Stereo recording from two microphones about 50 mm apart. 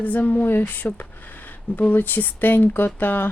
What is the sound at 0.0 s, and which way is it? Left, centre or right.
Speech, left.